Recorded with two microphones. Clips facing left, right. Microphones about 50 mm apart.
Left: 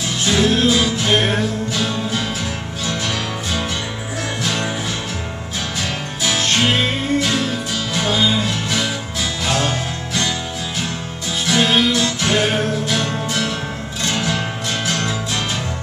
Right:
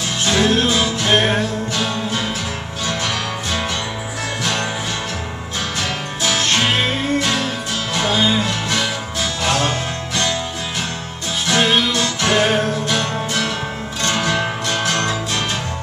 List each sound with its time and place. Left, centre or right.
0.3 s music: centre
0.7 s music: centre
1.4 s music: centre
7.9 s music: centre
9.4 s music: centre
11.4 s music: centre
12.3 s music: centre
13.0 s music: centre
14.7 s music: centre